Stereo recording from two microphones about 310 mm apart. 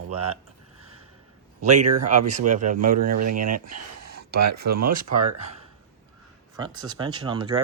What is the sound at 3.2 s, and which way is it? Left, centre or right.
Speech, right.